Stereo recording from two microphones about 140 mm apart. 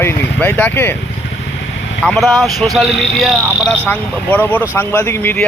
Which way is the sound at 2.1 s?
Centre (ahead or behind).